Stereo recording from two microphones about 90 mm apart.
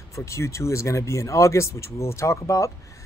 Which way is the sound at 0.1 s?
35° left (ahead or behind).